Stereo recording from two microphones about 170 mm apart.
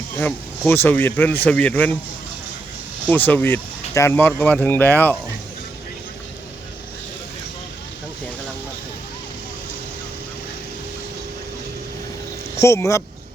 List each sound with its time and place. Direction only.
0.2 s speech: 10° left (ahead or behind)
3.1 s speech: 10° left (ahead or behind)
12.5 s speech: 15° left (ahead or behind)